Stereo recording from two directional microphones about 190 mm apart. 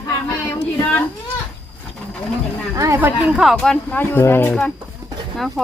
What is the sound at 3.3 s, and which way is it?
Speech, centre (ahead or behind).